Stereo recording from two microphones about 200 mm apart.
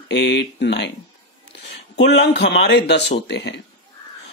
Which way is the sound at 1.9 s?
60° left (ahead or behind).